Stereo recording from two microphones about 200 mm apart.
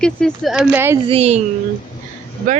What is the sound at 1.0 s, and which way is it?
Speech, 30° right (ahead or behind).